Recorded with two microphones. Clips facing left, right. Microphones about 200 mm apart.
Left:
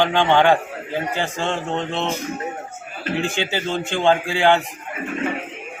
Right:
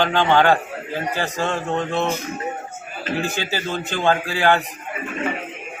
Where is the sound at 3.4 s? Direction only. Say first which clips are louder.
Left 2 dB; 20° left (ahead or behind).